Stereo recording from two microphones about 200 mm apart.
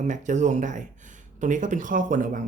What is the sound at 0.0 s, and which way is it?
Speech, 40° right (ahead or behind).